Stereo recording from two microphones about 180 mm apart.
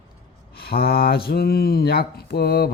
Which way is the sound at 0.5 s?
60° left (ahead or behind).